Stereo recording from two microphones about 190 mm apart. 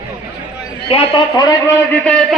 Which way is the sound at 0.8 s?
30° left (ahead or behind).